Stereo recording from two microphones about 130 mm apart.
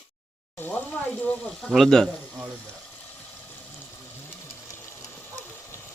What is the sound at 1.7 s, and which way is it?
Speech, centre (ahead or behind).